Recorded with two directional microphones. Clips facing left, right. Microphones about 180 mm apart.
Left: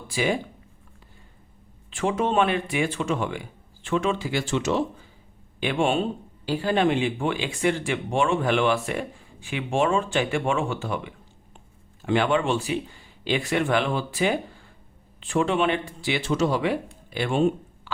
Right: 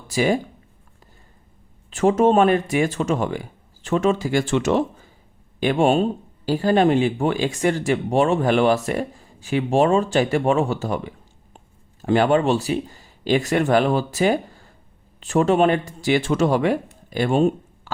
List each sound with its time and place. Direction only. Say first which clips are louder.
0.1 s speech: right 5 dB; 45° right (ahead or behind)
1.9 s speech: right 8 dB; 40° right (ahead or behind)
5.5 s speech: right 6 dB; 40° right (ahead or behind)